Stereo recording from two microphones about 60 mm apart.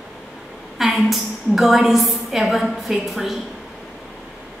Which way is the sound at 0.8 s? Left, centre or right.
Centre.